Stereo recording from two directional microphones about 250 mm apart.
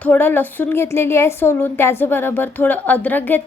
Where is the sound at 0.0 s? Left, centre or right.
Centre.